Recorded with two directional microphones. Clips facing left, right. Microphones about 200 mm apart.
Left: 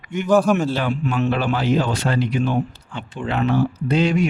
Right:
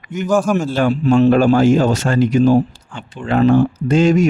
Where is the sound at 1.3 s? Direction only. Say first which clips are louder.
Right 8 dB; 45° right (ahead or behind).